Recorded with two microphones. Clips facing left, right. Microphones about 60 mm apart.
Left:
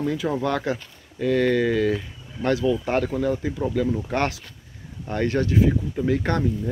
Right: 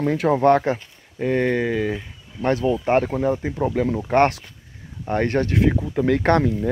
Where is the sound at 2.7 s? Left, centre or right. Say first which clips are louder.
Right 4 dB; right.